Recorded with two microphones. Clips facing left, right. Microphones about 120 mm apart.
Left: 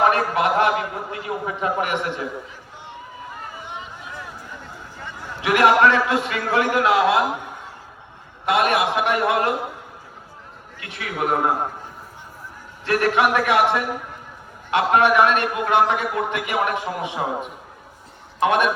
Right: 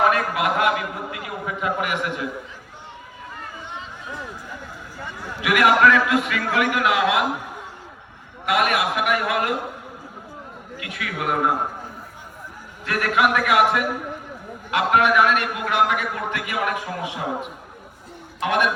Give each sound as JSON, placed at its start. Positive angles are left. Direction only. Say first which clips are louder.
{"t": 0.0, "sound": "a man's voice", "louder": "left 2 dB", "side_deg": 30}
{"t": 5.4, "sound": "a man's voice", "louder": "left 1 dB", "side_deg": 30}
{"t": 8.4, "sound": "a man's voice", "louder": "left 2 dB", "side_deg": 30}
{"t": 10.8, "sound": "a man's voice", "louder": "left 3 dB", "side_deg": 30}
{"t": 12.8, "sound": "a man's voice", "louder": "left 2 dB", "side_deg": 30}
{"t": 18.3, "sound": "a man's voice", "louder": "left 3 dB", "side_deg": 25}